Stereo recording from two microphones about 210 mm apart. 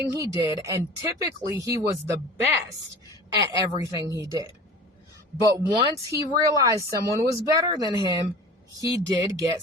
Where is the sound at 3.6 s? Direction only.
15° right (ahead or behind).